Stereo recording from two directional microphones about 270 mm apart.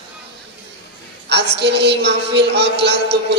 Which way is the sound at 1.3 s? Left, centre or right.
Right.